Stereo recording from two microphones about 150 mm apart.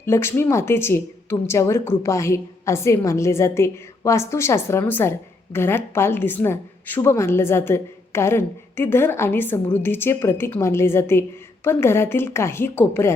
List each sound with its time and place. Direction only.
0.0 s speech: 15° left (ahead or behind)